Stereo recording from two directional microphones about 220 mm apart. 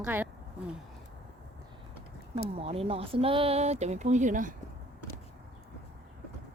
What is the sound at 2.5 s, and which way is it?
Speech, 25° right (ahead or behind).